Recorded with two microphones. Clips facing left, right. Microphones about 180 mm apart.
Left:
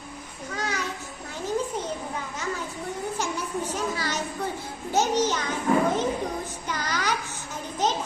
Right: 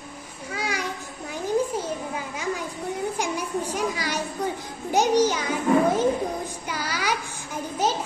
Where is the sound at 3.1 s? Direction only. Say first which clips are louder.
Right 2 dB; 15° right (ahead or behind).